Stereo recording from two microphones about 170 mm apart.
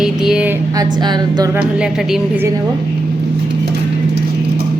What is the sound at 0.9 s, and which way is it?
Speech, 25° right (ahead or behind).